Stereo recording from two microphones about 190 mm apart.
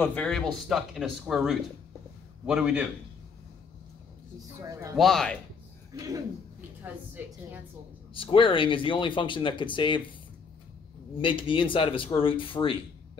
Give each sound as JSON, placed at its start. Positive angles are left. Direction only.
{"t": 0.0, "sound": "speech", "side_deg": 5}
{"t": 4.6, "sound": "a woman's voice", "side_deg": -15}
{"t": 4.9, "sound": "speech", "side_deg": 0}
{"t": 5.9, "sound": "a woman's voice", "side_deg": -15}
{"t": 8.1, "sound": "speech", "side_deg": 30}
{"t": 11.1, "sound": "speech", "side_deg": 25}